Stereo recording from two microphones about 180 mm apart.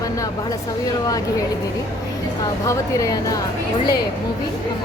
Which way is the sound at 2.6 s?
20° left (ahead or behind).